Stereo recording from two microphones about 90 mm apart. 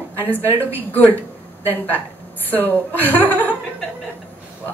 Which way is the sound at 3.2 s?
20° left (ahead or behind).